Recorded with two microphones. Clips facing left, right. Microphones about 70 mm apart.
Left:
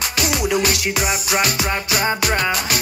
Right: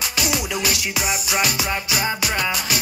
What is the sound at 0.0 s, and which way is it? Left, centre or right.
Music, left.